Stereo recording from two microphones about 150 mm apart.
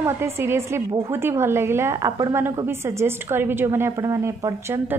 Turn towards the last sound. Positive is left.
turn(degrees=-15)  # may be behind; listen again after turning